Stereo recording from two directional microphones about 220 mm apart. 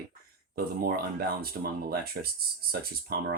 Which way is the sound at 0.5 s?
40° right (ahead or behind).